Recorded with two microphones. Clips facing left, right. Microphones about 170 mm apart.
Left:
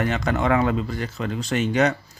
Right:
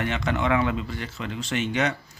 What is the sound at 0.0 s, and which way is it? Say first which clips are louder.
Speech: left 3 dB; 40° left (ahead or behind).